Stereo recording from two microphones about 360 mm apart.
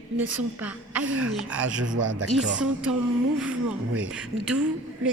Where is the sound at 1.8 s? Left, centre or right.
Right.